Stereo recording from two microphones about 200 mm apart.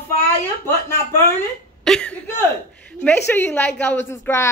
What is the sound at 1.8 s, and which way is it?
Speech, 5° left (ahead or behind).